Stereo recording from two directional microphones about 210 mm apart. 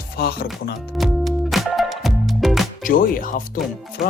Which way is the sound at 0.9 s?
Centre (ahead or behind).